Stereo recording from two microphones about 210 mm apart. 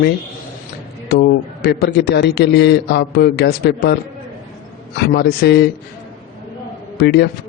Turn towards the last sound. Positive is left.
turn(degrees=50)  # may be behind; listen again after turning